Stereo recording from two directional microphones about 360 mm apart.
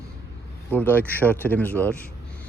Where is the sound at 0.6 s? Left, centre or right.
Centre.